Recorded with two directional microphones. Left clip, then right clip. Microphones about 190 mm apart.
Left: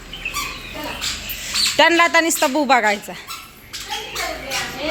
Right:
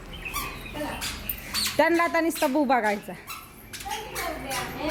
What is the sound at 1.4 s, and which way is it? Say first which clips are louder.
Speech: left 8 dB; centre (ahead or behind).